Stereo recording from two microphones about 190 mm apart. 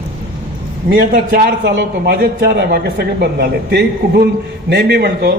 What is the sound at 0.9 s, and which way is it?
A man's voice, 55° right (ahead or behind).